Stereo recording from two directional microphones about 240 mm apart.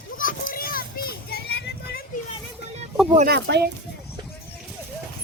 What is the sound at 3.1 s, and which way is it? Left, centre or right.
Speech, right.